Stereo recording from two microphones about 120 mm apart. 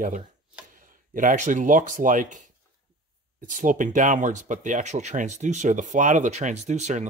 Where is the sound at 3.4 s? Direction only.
90° right; by 7.0 s 75° right (ahead or behind).